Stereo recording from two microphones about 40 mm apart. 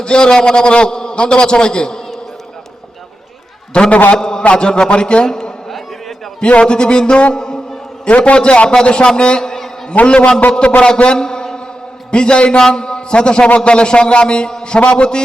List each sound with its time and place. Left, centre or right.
0.0 s a man's voice: left
3.7 s a man's voice: left
8.0 s a man's voice: left